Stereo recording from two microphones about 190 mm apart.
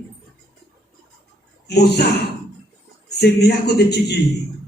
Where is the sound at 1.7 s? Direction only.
60° left (ahead or behind).